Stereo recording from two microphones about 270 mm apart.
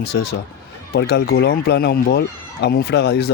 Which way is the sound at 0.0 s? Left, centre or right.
Left.